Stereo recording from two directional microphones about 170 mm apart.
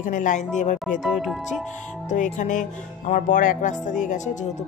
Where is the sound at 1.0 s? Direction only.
Centre (ahead or behind).